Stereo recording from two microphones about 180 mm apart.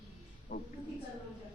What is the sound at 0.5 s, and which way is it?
Speech, 55° left (ahead or behind).